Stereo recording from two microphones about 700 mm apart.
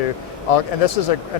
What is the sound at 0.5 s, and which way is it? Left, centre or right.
Speech, left.